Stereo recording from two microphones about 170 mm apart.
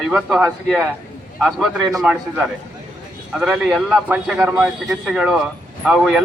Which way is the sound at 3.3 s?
Centre (ahead or behind).